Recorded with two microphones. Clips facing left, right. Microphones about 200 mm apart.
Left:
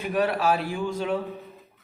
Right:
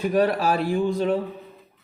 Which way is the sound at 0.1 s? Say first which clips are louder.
Right 1 dB; 40° right (ahead or behind).